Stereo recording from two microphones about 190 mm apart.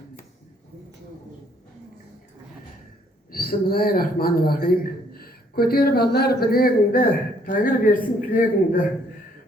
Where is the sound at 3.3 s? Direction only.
50° left (ahead or behind).